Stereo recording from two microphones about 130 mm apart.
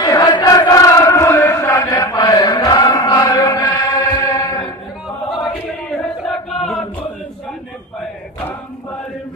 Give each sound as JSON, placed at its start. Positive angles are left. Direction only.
{"t": 0.0, "sound": "chant", "side_deg": 30}
{"t": 5.4, "sound": "chant", "side_deg": 0}